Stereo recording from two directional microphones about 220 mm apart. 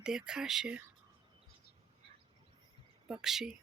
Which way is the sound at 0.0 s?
5° right (ahead or behind).